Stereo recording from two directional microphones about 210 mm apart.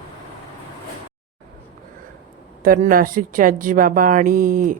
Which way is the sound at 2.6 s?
40° right (ahead or behind).